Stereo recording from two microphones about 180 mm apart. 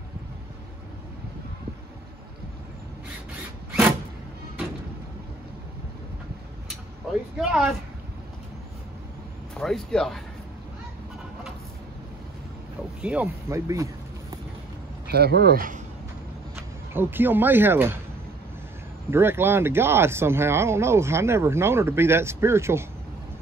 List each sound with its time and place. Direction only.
7.3 s speech: 5° right (ahead or behind)
9.5 s speech: 5° left (ahead or behind)
13.0 s speech: 10° right (ahead or behind)
15.0 s speech: 60° right (ahead or behind)
16.9 s speech: 10° right (ahead or behind)
19.0 s speech: 15° right (ahead or behind)